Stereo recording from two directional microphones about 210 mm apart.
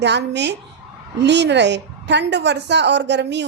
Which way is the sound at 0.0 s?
55° right (ahead or behind).